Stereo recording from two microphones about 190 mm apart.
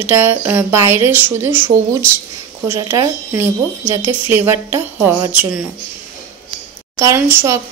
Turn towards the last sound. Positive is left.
turn(degrees=-10)  # may be behind; listen again after turning